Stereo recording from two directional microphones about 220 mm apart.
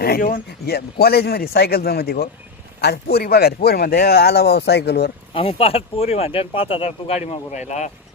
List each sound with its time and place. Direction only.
0.0 s speech: 45° left (ahead or behind)
5.3 s speech: 25° left (ahead or behind)